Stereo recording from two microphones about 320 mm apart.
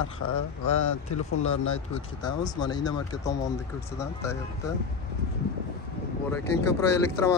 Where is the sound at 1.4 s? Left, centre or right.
Left.